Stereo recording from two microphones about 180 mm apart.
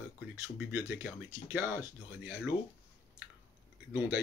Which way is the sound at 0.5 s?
10° right (ahead or behind).